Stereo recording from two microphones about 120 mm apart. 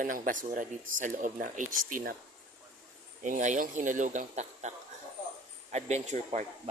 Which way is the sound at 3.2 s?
90° right.